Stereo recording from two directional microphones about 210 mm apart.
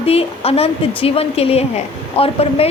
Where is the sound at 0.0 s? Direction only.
30° left (ahead or behind).